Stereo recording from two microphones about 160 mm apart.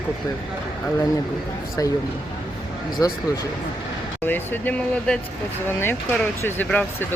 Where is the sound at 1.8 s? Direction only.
20° left (ahead or behind).